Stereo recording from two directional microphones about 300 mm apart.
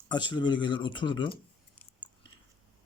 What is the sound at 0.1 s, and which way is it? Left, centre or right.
Speech, centre.